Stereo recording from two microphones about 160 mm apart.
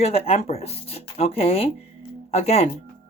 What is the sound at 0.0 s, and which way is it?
Speech, 40° left (ahead or behind).